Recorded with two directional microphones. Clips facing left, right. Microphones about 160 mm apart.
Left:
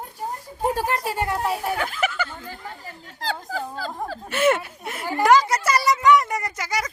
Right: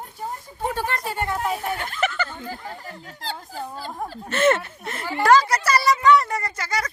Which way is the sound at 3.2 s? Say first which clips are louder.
Left 5 dB; 90° left.